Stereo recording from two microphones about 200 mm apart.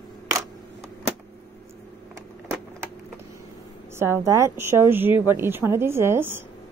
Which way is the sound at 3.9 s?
10° right (ahead or behind).